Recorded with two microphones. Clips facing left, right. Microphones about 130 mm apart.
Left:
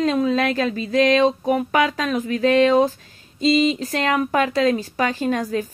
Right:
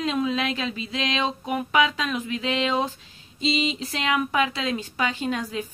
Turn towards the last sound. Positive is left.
turn(degrees=40)  # may be behind; listen again after turning